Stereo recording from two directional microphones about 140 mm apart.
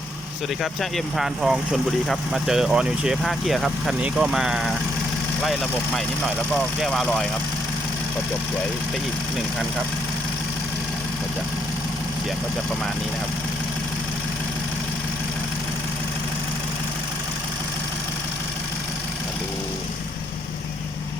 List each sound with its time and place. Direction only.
0.6 s speech: centre (ahead or behind)